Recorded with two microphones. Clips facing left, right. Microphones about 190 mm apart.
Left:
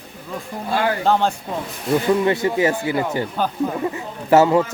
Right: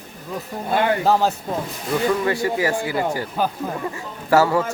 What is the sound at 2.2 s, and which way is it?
Speech, 25° left (ahead or behind).